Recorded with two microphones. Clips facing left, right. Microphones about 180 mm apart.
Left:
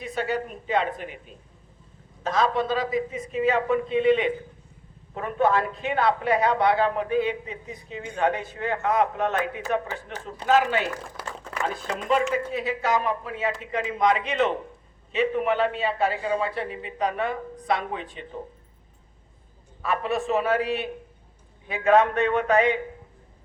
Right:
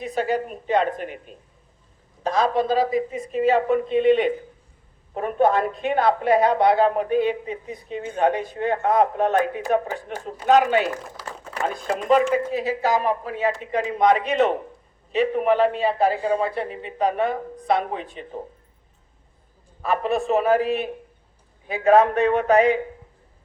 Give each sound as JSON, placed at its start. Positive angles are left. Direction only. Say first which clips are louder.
{"t": 0.0, "sound": "speech", "louder": "right 4 dB", "side_deg": -40}
{"t": 2.2, "sound": "a woman's voice", "louder": "right 3 dB", "side_deg": -35}
{"t": 19.8, "sound": "speech", "louder": "right 3 dB", "side_deg": -35}
{"t": 20.6, "sound": "a man's voice", "louder": "right 4 dB", "side_deg": 0}
{"t": 21.7, "sound": "speech", "louder": "right 3 dB", "side_deg": -35}